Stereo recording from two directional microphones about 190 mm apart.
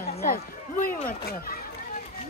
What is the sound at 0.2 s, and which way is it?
Speech, 45° left (ahead or behind).